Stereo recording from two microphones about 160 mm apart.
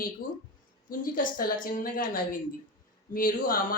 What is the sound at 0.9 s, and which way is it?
A woman's voice, 60° left (ahead or behind).